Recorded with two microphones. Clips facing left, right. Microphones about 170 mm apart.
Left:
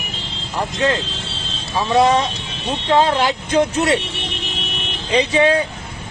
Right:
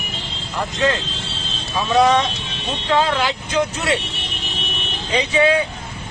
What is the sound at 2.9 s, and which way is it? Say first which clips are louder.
Speech: left 3 dB; 40° left (ahead or behind).